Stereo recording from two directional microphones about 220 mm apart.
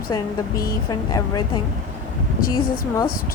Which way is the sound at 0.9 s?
20° left (ahead or behind).